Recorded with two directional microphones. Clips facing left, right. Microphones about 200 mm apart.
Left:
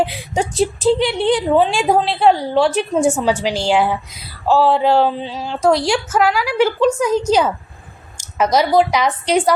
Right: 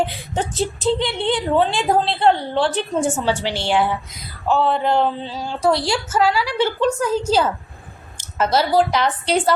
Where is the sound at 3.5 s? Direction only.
90° left.